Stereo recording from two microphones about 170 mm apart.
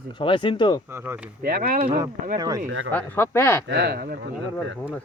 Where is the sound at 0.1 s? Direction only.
30° left (ahead or behind).